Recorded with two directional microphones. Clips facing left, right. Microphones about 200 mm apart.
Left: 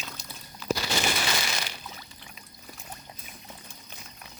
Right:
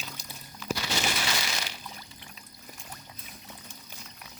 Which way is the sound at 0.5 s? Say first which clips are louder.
Left 4 dB; 35° left (ahead or behind).